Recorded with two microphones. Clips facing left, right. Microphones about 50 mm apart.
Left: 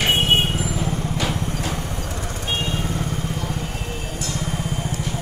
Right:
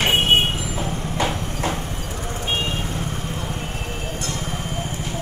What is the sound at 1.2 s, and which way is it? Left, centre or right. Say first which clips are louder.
Vehicle: right 6 dB; right.